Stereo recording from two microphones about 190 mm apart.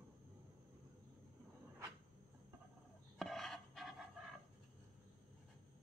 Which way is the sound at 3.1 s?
Centre (ahead or behind).